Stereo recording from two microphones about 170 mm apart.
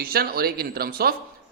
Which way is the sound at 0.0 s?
60° right (ahead or behind).